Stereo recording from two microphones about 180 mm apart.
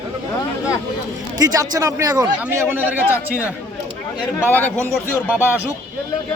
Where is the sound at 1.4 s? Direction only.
20° right (ahead or behind).